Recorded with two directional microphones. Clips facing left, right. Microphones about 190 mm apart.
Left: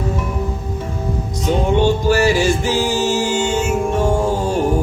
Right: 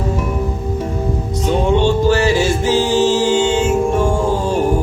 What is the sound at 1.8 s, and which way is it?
Music, 10° left (ahead or behind).